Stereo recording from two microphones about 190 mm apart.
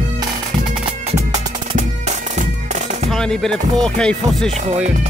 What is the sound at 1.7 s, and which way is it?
Music, 35° right (ahead or behind).